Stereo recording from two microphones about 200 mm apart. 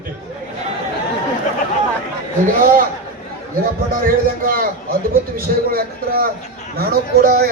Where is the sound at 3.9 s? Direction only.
45° right (ahead or behind).